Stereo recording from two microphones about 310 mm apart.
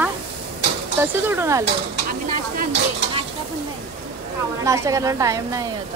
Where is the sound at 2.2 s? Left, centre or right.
Right.